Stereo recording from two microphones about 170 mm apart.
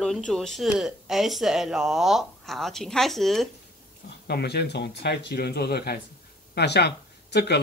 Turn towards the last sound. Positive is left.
turn(degrees=75)  # may be behind; listen again after turning